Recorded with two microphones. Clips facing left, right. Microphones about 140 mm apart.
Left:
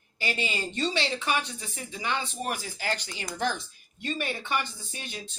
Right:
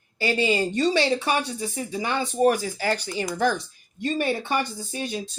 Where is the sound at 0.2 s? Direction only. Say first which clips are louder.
Right 9 dB; 35° right (ahead or behind).